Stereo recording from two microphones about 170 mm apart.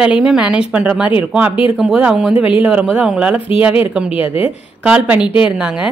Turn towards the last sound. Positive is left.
turn(degrees=30)  # may be behind; listen again after turning